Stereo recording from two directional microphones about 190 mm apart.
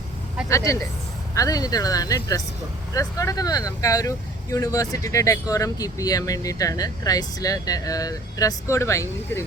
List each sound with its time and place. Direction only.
0.4 s speech: 15° left (ahead or behind)